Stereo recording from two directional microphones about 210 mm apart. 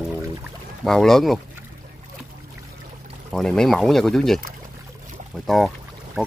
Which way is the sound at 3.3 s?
Centre (ahead or behind).